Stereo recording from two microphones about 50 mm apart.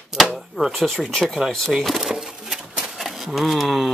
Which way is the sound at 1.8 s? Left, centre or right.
Centre.